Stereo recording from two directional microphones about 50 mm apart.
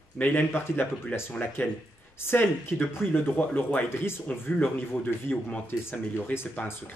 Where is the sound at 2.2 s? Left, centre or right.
Left.